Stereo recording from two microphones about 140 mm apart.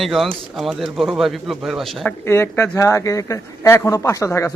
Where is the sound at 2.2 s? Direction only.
15° left (ahead or behind).